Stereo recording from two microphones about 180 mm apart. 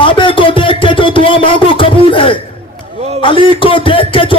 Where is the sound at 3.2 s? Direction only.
30° left (ahead or behind).